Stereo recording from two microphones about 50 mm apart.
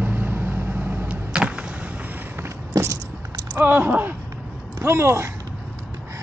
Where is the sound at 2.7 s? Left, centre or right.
Right.